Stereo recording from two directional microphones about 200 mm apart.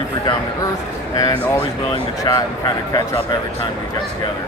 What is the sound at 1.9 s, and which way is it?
Speech, 20° left (ahead or behind).